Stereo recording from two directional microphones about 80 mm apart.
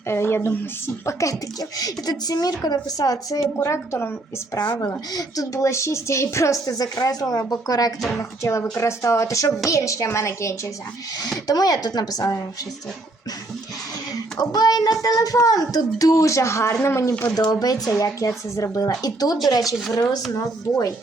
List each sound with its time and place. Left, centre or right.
0.1 s speech: left
1.8 s speech: left
3.6 s speech: left
4.5 s speech: left
5.1 s speech: left
8.2 s speech: left
11.4 s speech: left
14.3 s speech: left
17.3 s speech: left
20.3 s speech: left